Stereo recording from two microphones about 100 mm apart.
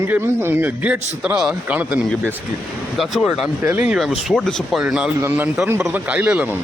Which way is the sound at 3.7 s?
15° right (ahead or behind).